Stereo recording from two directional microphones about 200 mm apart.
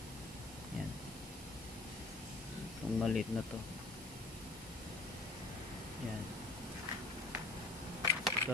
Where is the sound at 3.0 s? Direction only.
Centre (ahead or behind).